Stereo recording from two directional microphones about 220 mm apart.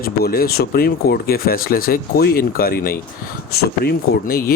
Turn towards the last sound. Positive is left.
turn(degrees=45)  # may be behind; listen again after turning